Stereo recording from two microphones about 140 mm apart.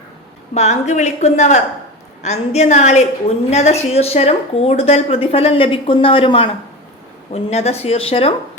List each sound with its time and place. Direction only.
0.5 s a woman's voice: 55° left (ahead or behind)